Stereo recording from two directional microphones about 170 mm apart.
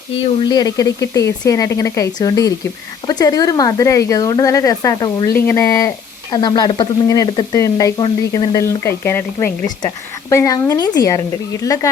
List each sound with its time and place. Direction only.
0.4 s speech: 25° left (ahead or behind)